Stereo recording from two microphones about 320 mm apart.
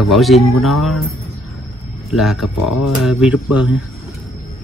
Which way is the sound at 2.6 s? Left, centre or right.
Left.